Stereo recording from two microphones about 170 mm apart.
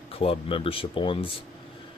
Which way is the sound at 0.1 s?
35° left (ahead or behind).